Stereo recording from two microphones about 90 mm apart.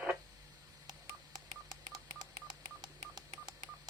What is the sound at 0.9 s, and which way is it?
Telephone dialing, 50° right (ahead or behind).